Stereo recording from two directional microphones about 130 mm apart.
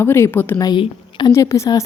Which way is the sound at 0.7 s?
40° left (ahead or behind).